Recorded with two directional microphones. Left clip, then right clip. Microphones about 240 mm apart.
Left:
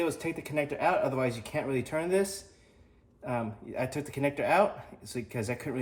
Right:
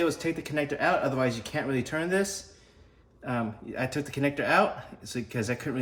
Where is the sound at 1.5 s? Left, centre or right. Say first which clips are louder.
Right 2 dB; centre.